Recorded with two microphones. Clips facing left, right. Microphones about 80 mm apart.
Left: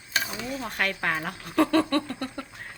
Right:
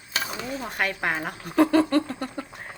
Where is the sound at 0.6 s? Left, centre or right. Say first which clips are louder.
Right 1 dB; centre.